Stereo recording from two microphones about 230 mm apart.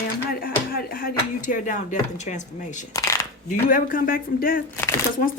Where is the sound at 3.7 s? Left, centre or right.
Left.